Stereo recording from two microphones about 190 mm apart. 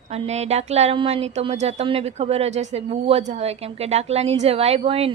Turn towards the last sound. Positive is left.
turn(degrees=-30)  # may be behind; listen again after turning